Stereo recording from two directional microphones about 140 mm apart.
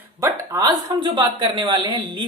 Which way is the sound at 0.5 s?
30° right (ahead or behind).